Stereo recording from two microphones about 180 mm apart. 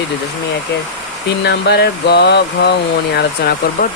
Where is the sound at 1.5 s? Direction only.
65° left (ahead or behind).